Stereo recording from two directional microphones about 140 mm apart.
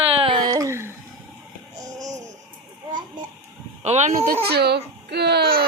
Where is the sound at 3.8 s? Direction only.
50° right (ahead or behind).